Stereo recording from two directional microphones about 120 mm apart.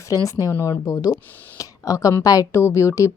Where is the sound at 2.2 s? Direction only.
30° left (ahead or behind).